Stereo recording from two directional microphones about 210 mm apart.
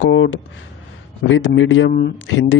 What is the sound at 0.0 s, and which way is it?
Speech, 65° left (ahead or behind).